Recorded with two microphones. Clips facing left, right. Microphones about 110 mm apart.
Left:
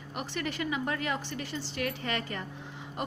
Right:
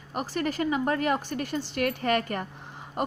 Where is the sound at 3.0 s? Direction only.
45° right (ahead or behind).